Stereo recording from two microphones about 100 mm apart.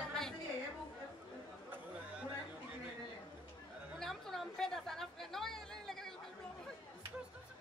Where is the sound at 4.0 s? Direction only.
5° left (ahead or behind).